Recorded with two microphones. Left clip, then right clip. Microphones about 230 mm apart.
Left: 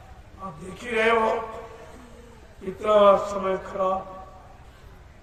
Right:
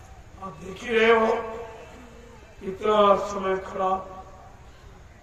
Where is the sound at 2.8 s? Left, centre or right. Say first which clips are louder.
Left 2 dB; left.